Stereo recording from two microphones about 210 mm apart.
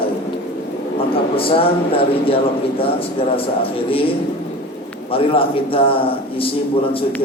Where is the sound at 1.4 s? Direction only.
25° left (ahead or behind).